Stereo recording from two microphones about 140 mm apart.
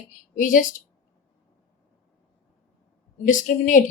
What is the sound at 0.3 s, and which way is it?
Speech, 70° left (ahead or behind).